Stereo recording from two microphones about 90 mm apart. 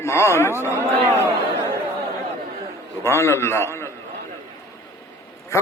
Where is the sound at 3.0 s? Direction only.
30° left (ahead or behind).